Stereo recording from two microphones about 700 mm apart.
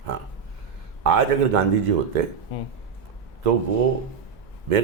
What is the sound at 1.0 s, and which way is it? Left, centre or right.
Speech, right.